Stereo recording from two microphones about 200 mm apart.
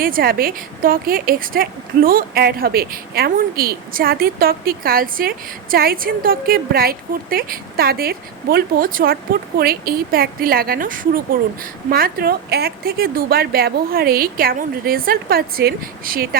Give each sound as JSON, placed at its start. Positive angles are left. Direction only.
{"t": 0.0, "sound": "a woman's voice", "side_deg": -50}